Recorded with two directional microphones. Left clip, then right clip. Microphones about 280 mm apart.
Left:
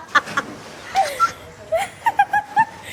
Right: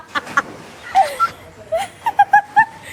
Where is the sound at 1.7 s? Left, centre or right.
Centre.